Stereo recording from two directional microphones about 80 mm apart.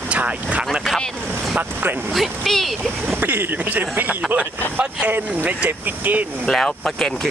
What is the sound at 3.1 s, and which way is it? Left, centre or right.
Speech, right.